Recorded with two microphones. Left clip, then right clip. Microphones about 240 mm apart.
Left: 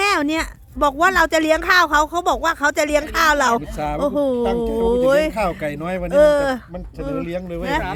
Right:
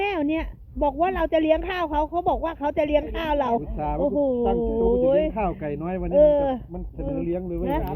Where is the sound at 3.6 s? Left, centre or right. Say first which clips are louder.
Left 3 dB; left.